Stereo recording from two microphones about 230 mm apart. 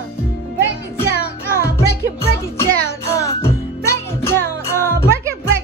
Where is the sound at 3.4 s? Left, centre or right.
Centre.